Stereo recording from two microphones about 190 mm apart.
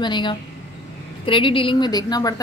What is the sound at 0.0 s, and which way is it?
Speech, 25° left (ahead or behind).